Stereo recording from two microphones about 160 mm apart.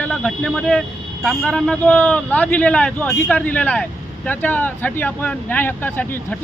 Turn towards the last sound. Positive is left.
turn(degrees=10)  # may be behind; listen again after turning